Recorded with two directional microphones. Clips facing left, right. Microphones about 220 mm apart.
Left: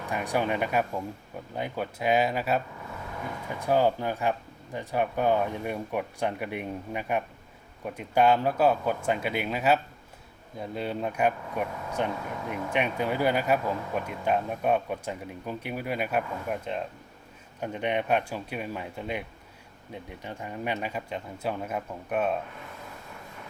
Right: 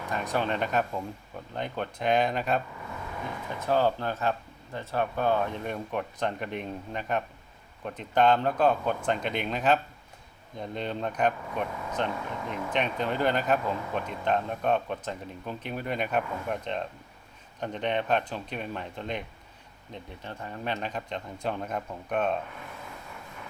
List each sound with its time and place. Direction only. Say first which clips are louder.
0.1 s speech: left 2 dB; 10° left (ahead or behind)
3.6 s speech: left 2 dB; 15° left (ahead or behind)